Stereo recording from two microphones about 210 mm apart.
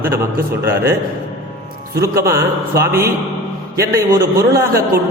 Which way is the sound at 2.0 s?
15° right (ahead or behind).